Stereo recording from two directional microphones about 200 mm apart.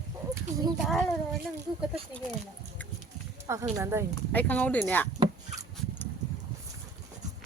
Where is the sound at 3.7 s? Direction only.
15° right (ahead or behind).